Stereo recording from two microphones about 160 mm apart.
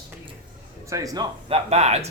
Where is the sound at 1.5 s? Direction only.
40° right (ahead or behind).